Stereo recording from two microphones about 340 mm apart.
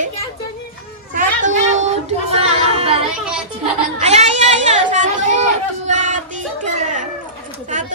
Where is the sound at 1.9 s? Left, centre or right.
Centre.